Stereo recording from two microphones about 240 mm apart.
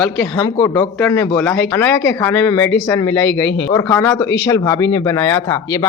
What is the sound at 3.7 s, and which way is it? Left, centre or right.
Speech, centre.